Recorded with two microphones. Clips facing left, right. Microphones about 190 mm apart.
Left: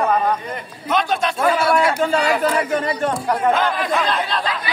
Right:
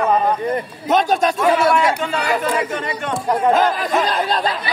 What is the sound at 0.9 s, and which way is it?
Speech, 45° right (ahead or behind).